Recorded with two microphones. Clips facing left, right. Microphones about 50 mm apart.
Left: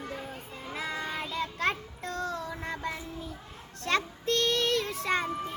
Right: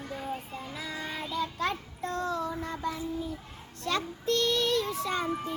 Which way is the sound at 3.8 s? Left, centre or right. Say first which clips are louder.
Left 2 dB; left.